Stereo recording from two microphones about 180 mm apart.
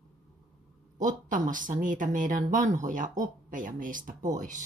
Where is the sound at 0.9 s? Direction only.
45° right (ahead or behind).